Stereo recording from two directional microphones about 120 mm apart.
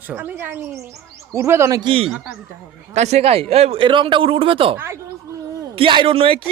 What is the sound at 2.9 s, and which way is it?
A man's voice, 70° right (ahead or behind).